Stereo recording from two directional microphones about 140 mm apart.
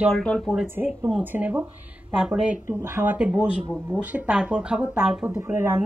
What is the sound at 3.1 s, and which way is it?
A woman's voice, 10° right (ahead or behind).